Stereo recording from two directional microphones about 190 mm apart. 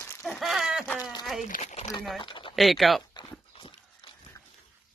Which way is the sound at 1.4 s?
40° left (ahead or behind).